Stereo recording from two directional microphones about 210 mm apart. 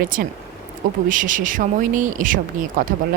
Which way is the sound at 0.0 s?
45° right (ahead or behind).